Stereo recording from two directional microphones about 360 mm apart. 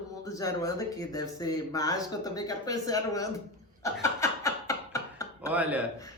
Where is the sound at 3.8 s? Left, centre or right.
Centre.